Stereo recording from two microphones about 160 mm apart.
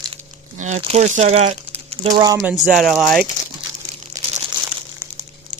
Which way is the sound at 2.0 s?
20° right (ahead or behind).